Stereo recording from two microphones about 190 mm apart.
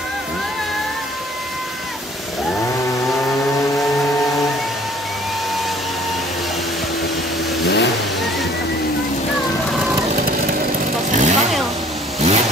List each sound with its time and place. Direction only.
7.6 s vehicle: 65° left (ahead or behind)
11.1 s vehicle: 40° right (ahead or behind)